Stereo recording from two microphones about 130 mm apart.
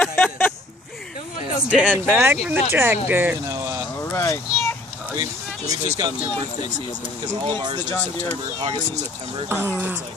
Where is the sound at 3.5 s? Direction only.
25° right (ahead or behind).